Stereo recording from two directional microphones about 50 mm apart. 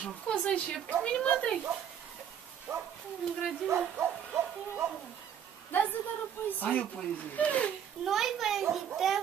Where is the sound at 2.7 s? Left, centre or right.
Right.